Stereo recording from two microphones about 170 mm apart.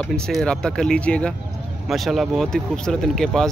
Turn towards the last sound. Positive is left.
turn(degrees=5)  # may be behind; listen again after turning